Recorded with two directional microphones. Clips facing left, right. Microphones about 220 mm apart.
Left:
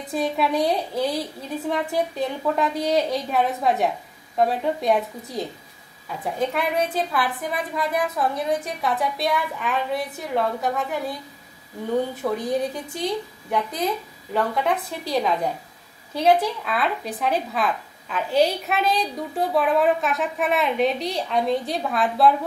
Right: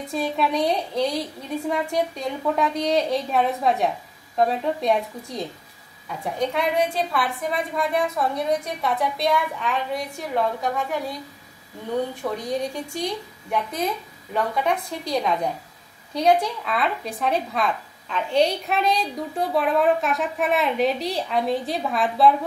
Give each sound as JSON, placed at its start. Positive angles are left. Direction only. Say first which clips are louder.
{"t": 0.0, "sound": "a woman's voice", "louder": "left 1 dB", "side_deg": 0}
{"t": 6.4, "sound": "a woman's voice", "louder": "right 1 dB", "side_deg": 0}